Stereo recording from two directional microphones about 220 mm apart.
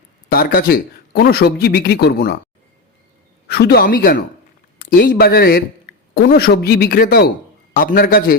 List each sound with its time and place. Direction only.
0.3 s speech: 45° left (ahead or behind)
3.5 s a man's voice: 45° left (ahead or behind)